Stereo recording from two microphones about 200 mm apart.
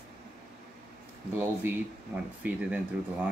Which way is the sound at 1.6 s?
10° right (ahead or behind).